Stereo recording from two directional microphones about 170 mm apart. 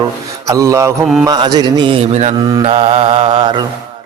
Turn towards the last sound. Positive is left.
turn(degrees=-25)  # may be behind; listen again after turning